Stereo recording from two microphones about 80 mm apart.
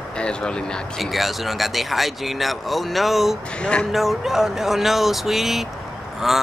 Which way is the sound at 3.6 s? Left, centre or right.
Centre.